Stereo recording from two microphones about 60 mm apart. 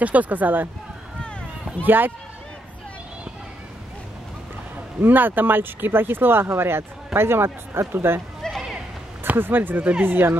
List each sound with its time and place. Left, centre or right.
0.0 s speech: right
1.9 s speech: right
5.0 s speech: right
8.4 s horse: centre
9.3 s speech: right